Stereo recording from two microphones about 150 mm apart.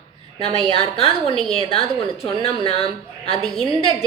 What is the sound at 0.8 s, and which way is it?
A woman's voice, 40° left (ahead or behind).